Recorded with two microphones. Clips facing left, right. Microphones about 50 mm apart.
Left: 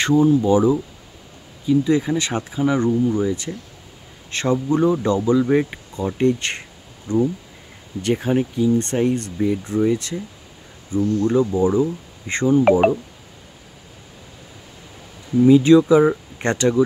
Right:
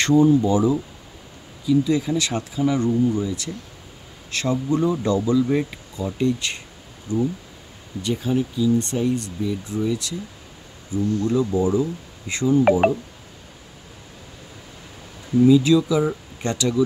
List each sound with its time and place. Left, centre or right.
0.0 s speech: centre
0.4 s speech: left
5.9 s speech: left
11.2 s speech: left
15.4 s speech: left